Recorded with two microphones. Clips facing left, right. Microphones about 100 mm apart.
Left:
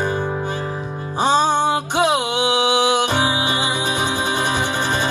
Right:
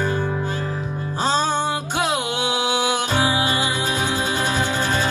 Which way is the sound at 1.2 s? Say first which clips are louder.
Left 5 dB; 15° left (ahead or behind).